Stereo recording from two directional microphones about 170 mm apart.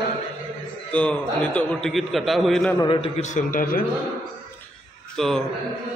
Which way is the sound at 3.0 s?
45° left (ahead or behind).